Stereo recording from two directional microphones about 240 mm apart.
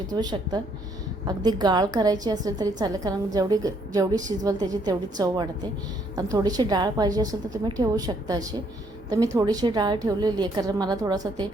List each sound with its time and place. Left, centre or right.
0.1 s a woman's voice: centre